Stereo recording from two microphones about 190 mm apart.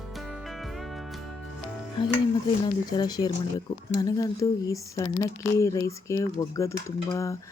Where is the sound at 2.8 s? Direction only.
20° left (ahead or behind).